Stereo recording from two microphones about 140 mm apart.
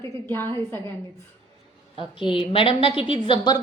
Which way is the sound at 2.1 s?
40° left (ahead or behind).